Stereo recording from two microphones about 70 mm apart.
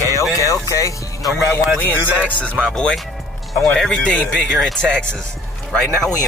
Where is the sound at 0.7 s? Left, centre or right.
Left.